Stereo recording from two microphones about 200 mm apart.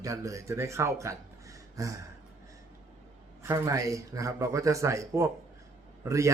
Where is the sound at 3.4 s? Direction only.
15° right (ahead or behind).